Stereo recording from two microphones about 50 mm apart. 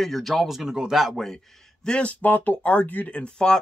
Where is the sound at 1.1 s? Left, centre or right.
Centre.